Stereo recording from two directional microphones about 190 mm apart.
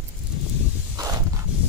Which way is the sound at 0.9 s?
20° right (ahead or behind).